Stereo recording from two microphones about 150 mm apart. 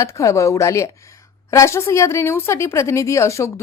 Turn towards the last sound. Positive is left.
turn(degrees=20)  # may be behind; listen again after turning